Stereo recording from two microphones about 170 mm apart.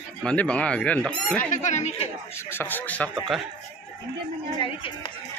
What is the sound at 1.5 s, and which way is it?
Speech, 45° left (ahead or behind).